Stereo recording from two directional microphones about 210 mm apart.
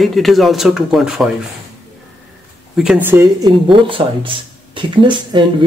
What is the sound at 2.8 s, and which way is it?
Speech, 5° right (ahead or behind).